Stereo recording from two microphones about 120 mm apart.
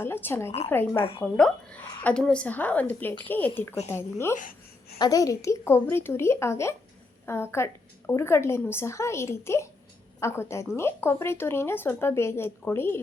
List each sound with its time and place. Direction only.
0.0 s speech: 20° left (ahead or behind)
0.9 s a woman's voice: 50° left (ahead or behind)
1.2 s speech: 10° left (ahead or behind)
4.9 s speech: 30° left (ahead or behind)